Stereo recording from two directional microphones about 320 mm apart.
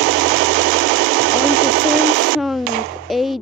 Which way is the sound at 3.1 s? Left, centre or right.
Centre.